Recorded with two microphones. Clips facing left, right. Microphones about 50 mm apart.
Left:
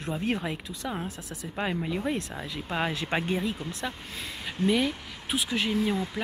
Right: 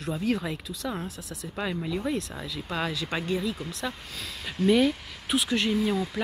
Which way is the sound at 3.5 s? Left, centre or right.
Centre.